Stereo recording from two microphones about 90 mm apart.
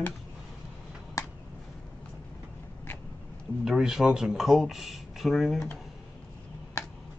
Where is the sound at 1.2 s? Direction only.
35° left (ahead or behind).